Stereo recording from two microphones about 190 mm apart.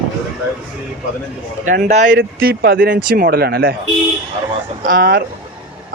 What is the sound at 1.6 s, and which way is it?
Speech, 45° right (ahead or behind).